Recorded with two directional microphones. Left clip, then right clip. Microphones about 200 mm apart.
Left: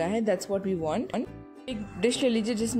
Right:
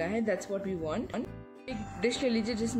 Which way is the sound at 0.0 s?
35° left (ahead or behind).